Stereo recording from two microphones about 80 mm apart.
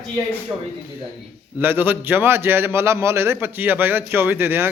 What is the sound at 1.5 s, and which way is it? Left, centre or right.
A man's voice, right.